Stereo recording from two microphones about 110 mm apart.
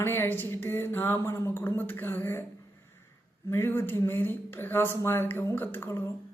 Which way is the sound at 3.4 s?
20° left (ahead or behind).